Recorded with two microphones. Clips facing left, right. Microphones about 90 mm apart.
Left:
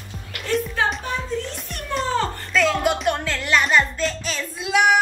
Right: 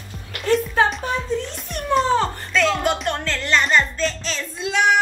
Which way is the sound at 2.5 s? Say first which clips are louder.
Left 1 dB; 5° left (ahead or behind).